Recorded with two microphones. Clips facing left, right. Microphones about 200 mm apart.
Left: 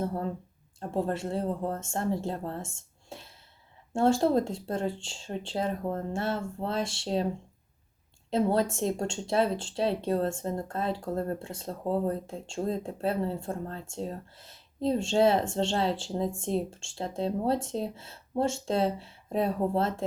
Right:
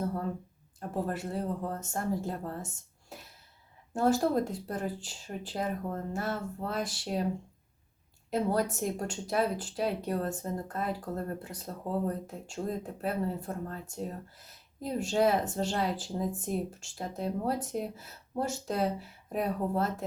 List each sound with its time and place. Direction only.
0.8 s speech: 25° left (ahead or behind)
8.3 s speech: 25° left (ahead or behind)